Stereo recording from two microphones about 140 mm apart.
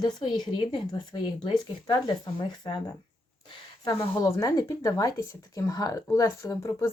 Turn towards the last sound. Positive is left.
turn(degrees=20)  # may be behind; listen again after turning